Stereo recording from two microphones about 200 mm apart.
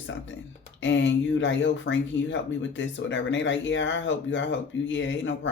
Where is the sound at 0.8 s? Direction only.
65° left (ahead or behind).